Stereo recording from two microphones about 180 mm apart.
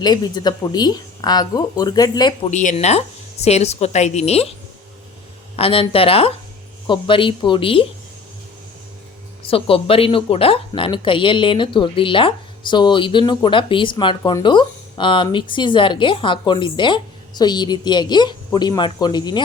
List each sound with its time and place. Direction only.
0.0 s speech: 25° left (ahead or behind)
2.5 s a woman's voice: 40° left (ahead or behind)
5.5 s a woman's voice: 30° left (ahead or behind)
9.4 s speech: 30° left (ahead or behind)